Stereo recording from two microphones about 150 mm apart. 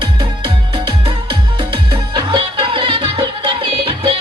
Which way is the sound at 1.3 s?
30° right (ahead or behind).